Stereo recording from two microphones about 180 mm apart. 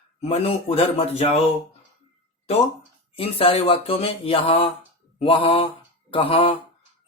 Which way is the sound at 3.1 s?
30° left (ahead or behind).